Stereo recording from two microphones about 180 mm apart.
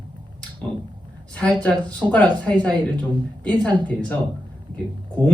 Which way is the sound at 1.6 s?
5° left (ahead or behind).